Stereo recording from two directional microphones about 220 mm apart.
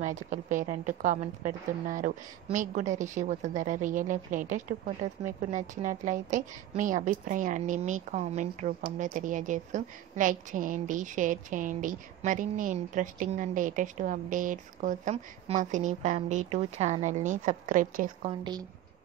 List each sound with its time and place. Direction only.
0.0 s a woman's voice: 35° right (ahead or behind)
18.4 s speech: 20° right (ahead or behind)